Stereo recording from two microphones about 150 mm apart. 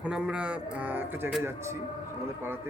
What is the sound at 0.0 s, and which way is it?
Speech, 5° right (ahead or behind).